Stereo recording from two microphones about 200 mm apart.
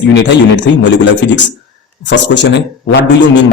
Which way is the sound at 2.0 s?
60° left (ahead or behind).